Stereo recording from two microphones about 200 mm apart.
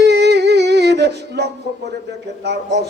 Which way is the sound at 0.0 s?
55° right (ahead or behind).